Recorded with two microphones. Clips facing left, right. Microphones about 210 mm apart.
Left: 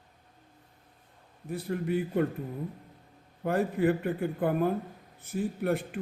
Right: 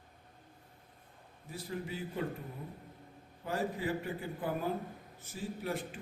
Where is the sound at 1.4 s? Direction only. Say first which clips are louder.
Left 9 dB; 60° left (ahead or behind).